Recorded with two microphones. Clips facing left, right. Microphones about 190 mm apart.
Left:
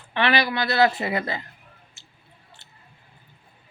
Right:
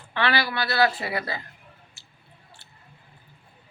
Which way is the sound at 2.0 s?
20° left (ahead or behind).